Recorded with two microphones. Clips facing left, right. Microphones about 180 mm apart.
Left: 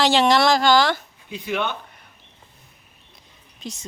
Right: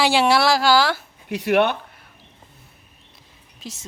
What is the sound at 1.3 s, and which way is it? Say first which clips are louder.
Speech: right 8 dB; 75° right (ahead or behind).